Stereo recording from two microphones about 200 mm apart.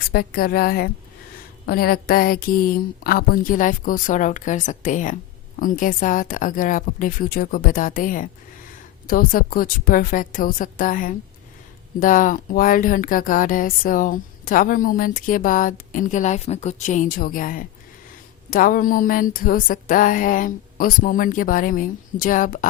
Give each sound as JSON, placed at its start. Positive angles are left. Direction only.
{"t": 0.1, "sound": "speech", "side_deg": 50}